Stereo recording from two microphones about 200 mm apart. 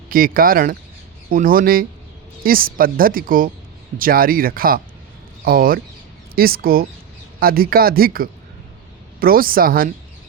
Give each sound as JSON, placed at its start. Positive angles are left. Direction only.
{"t": 0.1, "sound": "a woman's voice", "side_deg": -45}